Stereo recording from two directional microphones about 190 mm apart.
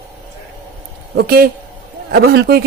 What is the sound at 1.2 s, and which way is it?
Speech, 55° right (ahead or behind).